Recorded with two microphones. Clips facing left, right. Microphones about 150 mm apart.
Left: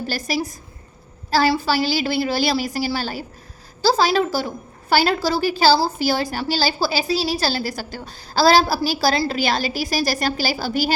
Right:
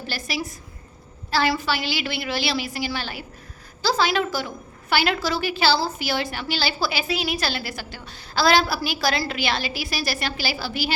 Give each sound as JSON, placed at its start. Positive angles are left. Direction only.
{"t": 0.1, "sound": "a woman's voice", "side_deg": 40}